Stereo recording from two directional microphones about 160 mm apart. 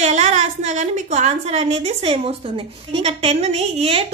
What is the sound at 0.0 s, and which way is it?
A woman's voice, 45° right (ahead or behind).